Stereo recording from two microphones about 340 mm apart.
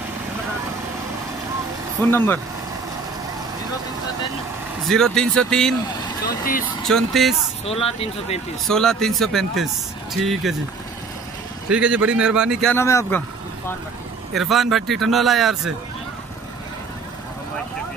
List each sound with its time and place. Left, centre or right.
2.0 s a man's voice: centre
4.8 s a man's voice: centre
6.8 s a man's voice: centre
7.6 s speech: centre
8.6 s a man's voice: centre
11.7 s a man's voice: centre
14.3 s a man's voice: centre